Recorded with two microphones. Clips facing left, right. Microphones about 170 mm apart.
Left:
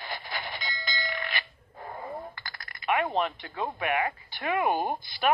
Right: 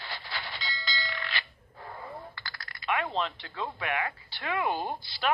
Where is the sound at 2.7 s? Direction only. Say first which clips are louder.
Left 4 dB; 15° left (ahead or behind).